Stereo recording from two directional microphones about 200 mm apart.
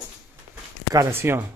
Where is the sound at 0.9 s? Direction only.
15° right (ahead or behind).